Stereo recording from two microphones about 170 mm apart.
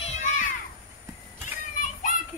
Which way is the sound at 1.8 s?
50° left (ahead or behind).